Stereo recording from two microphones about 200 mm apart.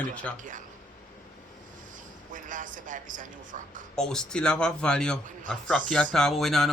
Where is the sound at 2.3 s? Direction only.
40° right (ahead or behind).